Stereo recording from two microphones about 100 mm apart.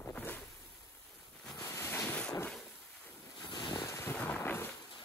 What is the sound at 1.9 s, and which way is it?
Boat, 10° left (ahead or behind).